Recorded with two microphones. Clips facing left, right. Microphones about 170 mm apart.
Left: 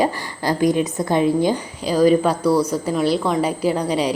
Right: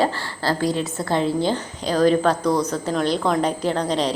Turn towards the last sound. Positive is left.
turn(degrees=10)  # may be behind; listen again after turning